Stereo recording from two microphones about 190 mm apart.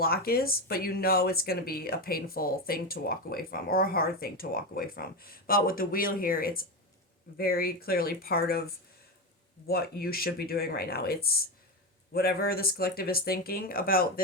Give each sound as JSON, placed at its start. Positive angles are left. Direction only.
{"t": 0.0, "sound": "speech", "side_deg": 50}